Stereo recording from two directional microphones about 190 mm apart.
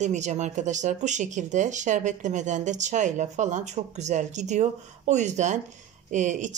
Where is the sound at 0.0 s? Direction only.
40° right (ahead or behind).